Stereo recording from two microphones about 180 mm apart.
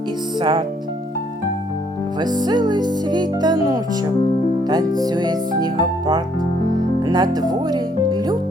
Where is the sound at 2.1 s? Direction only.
25° right (ahead or behind).